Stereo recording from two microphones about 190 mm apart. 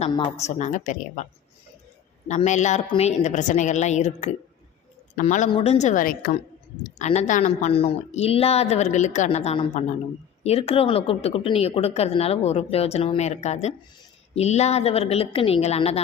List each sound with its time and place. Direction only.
0.3 s a woman's voice: 35° left (ahead or behind)
5.5 s a woman's voice: 30° left (ahead or behind)